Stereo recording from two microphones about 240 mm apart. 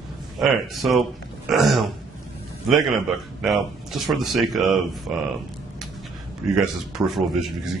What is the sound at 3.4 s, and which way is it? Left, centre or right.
Speech, centre.